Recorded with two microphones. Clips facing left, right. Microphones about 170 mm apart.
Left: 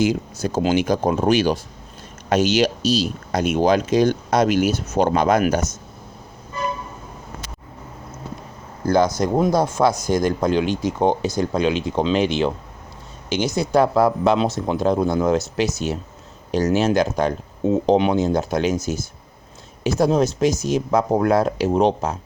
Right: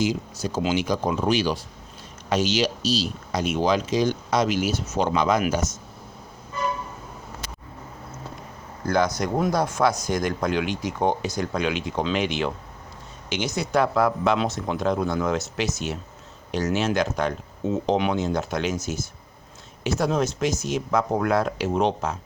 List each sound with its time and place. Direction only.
0.0 s speech: 50° left (ahead or behind)
8.9 s speech: 30° left (ahead or behind)